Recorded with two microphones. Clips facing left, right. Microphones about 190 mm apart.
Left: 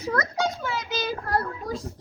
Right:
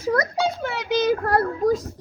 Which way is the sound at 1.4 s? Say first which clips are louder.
Right 10 dB; 45° right (ahead or behind).